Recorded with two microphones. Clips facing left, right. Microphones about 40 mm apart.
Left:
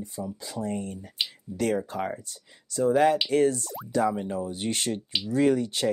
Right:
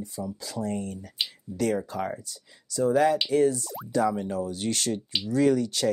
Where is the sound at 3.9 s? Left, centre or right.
Centre.